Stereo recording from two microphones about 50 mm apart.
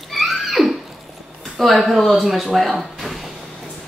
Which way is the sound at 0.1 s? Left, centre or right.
Centre.